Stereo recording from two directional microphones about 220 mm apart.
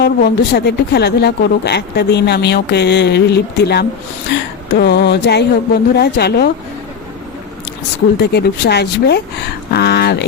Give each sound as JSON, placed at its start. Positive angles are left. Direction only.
{"t": 0.0, "sound": "speech", "side_deg": 45}
{"t": 8.2, "sound": "speech", "side_deg": 50}